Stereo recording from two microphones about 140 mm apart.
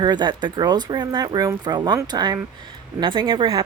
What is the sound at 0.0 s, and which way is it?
Speech, 30° right (ahead or behind).